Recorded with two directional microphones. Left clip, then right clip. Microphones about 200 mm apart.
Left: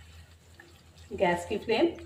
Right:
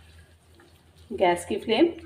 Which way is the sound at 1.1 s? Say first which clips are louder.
Right 4 dB; 35° right (ahead or behind).